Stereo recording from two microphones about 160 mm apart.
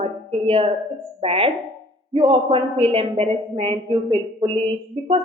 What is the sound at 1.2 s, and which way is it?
A woman's voice, 35° right (ahead or behind).